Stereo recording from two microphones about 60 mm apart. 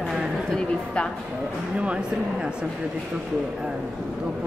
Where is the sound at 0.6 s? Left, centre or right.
Centre.